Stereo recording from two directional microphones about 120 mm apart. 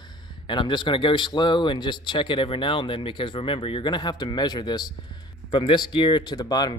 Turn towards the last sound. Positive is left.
turn(degrees=35)  # may be behind; listen again after turning